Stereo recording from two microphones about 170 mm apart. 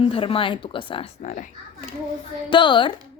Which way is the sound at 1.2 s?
45° left (ahead or behind).